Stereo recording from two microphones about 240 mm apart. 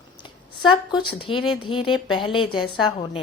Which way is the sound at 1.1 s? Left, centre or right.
Left.